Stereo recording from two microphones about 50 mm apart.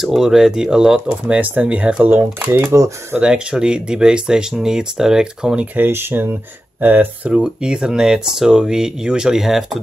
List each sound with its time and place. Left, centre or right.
0.0 s speech: centre
1.4 s speech: right
2.0 s speech: right
2.7 s speech: right
3.2 s speech: centre
5.9 s speech: right
6.8 s speech: right
7.4 s speech: centre